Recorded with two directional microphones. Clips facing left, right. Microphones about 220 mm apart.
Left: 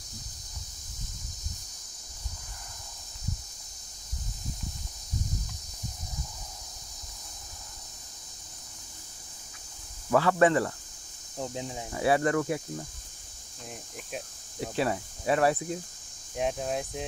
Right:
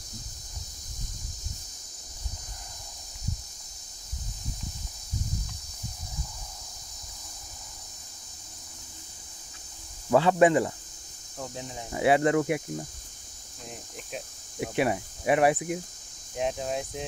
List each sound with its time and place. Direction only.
10.1 s speech: 20° right (ahead or behind)
11.3 s speech: 20° left (ahead or behind)
11.9 s speech: 20° right (ahead or behind)
14.6 s speech: 15° right (ahead or behind)
16.3 s speech: centre (ahead or behind)